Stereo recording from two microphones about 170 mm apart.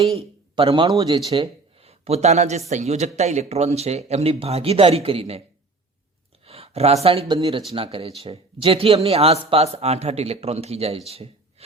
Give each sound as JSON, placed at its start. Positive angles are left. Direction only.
{"t": 0.0, "sound": "a man's voice", "side_deg": -35}
{"t": 6.4, "sound": "speech", "side_deg": -35}